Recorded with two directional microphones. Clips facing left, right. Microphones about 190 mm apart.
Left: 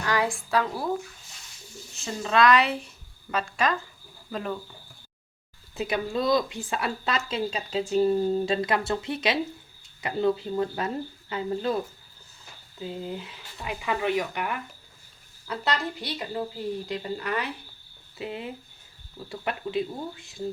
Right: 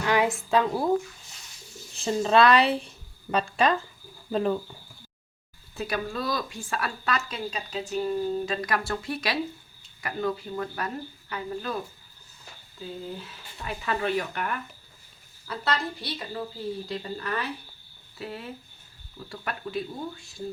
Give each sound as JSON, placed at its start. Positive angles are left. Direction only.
{"t": 0.0, "sound": "a woman's voice", "side_deg": -20}
{"t": 2.0, "sound": "a woman's voice", "side_deg": -30}
{"t": 5.7, "sound": "speech", "side_deg": 20}
{"t": 12.8, "sound": "a woman's voice", "side_deg": 15}